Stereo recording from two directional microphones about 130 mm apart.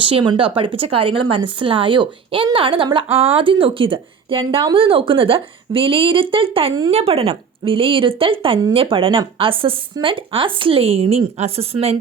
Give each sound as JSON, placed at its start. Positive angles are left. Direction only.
{"t": 0.0, "sound": "speech", "side_deg": -40}